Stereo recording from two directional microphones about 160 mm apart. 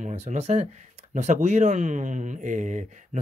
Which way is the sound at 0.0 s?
45° right (ahead or behind).